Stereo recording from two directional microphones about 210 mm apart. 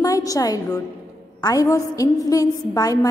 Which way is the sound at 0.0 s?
15° left (ahead or behind).